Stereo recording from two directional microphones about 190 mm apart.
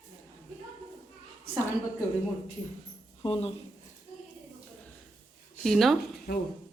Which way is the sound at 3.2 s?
30° left (ahead or behind).